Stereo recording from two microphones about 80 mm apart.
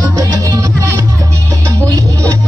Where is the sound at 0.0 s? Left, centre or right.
Right.